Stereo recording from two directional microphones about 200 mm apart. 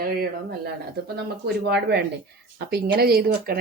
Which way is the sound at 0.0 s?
45° right (ahead or behind).